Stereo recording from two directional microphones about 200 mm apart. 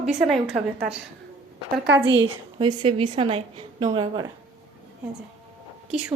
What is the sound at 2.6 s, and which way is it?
A woman's voice, 25° right (ahead or behind).